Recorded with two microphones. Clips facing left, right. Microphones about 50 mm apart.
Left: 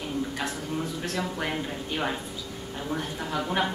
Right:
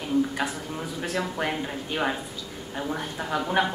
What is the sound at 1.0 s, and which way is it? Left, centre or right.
A woman's voice, centre.